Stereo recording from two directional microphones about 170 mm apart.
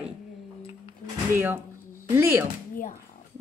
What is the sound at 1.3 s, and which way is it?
Speech, 15° right (ahead or behind).